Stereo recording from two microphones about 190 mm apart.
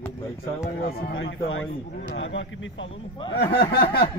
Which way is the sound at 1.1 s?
80° left.